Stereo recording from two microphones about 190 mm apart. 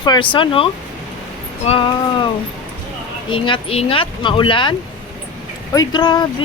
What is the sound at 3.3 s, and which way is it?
Speech, 25° left (ahead or behind).